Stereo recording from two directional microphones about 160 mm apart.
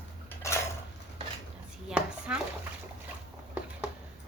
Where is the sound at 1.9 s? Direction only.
5° right (ahead or behind).